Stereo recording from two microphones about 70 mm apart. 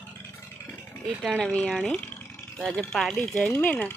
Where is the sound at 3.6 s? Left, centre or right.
Left.